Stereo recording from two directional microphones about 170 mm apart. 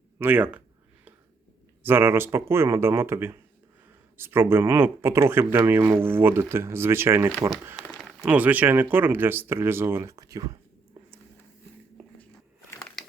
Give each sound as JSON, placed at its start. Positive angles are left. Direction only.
{"t": 0.2, "sound": "speech", "side_deg": -10}
{"t": 1.8, "sound": "speech", "side_deg": -15}
{"t": 13.0, "sound": "a sound", "side_deg": 0}